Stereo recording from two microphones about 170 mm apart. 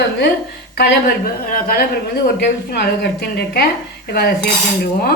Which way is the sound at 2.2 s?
70° left (ahead or behind).